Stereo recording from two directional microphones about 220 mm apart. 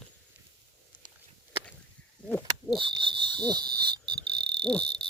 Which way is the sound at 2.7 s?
25° right (ahead or behind).